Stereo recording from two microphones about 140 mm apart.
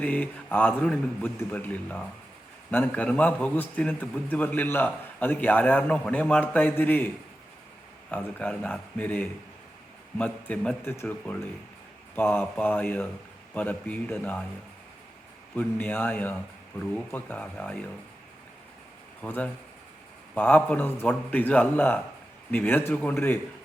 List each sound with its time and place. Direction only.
0.0 s a man's voice: 10° left (ahead or behind)
8.1 s a man's voice: 10° left (ahead or behind)
15.5 s a man's voice: 10° left (ahead or behind)
19.2 s a man's voice: 10° left (ahead or behind)